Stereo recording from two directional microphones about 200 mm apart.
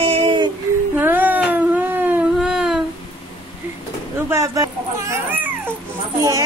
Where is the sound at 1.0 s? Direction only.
10° right (ahead or behind).